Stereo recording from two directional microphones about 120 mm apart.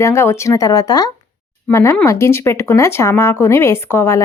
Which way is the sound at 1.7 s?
20° left (ahead or behind).